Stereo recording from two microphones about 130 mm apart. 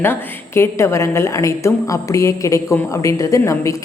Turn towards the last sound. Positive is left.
turn(degrees=25)  # may be behind; listen again after turning